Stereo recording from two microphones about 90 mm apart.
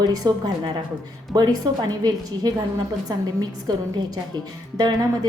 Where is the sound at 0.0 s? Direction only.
45° right (ahead or behind).